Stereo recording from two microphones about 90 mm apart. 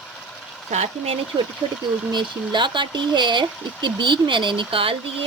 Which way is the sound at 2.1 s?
60° right (ahead or behind).